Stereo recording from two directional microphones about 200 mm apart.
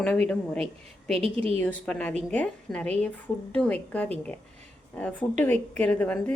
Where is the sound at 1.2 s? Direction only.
30° right (ahead or behind).